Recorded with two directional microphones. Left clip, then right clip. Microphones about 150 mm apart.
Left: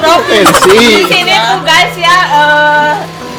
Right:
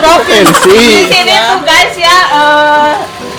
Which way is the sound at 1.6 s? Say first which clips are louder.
Right 1 dB; 45° left (ahead or behind).